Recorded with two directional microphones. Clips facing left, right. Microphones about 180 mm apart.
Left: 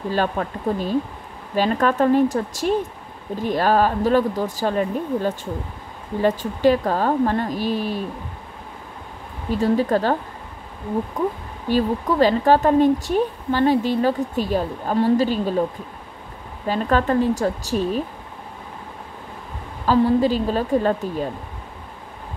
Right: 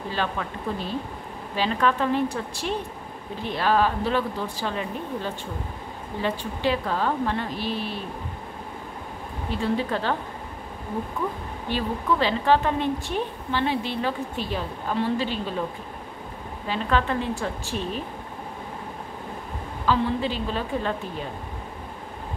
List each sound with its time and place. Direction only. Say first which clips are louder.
0.1 s a woman's voice: left 6 dB; 45° left (ahead or behind)
9.5 s speech: left 7 dB; 40° left (ahead or behind)
11.2 s a woman's voice: left 5 dB; 40° left (ahead or behind)
16.6 s speech: left 5 dB; 45° left (ahead or behind)
19.9 s speech: left 7 dB; 40° left (ahead or behind)